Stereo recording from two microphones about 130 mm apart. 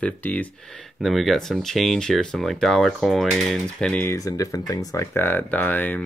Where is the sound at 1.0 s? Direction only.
Centre (ahead or behind).